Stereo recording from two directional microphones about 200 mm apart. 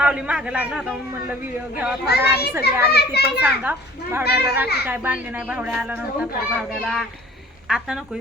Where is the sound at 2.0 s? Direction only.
55° left (ahead or behind).